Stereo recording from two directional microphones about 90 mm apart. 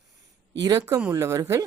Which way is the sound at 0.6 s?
45° right (ahead or behind).